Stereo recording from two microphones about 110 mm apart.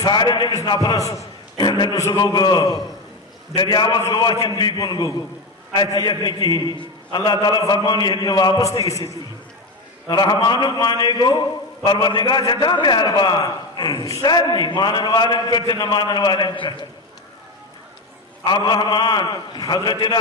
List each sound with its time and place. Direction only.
0.0 s a man's voice: 40° left (ahead or behind)
1.6 s a man's voice: 40° left (ahead or behind)
2.0 s a man's voice: 30° left (ahead or behind)
2.2 s a man's voice: 40° left (ahead or behind)
10.1 s a man's voice: 40° left (ahead or behind)
18.4 s a man's voice: 45° left (ahead or behind)